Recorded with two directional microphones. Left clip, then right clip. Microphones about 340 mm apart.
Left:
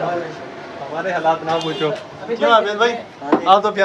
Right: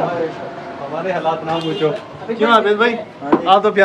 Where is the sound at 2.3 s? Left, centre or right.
Centre.